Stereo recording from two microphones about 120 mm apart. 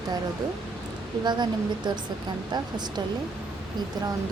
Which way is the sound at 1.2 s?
40° right (ahead or behind).